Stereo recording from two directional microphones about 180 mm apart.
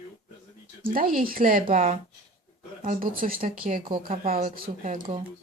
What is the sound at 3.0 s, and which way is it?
Speech, 50° right (ahead or behind).